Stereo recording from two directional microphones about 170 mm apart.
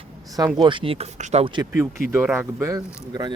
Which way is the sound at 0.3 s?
25° right (ahead or behind).